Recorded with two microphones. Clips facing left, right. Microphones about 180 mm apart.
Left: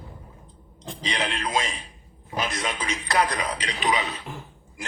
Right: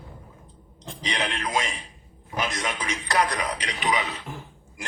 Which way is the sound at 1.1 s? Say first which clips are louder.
Even; 15° left (ahead or behind).